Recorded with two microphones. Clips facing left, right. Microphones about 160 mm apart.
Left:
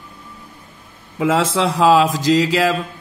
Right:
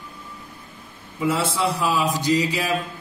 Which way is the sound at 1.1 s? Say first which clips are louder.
Left 6 dB; 90° left.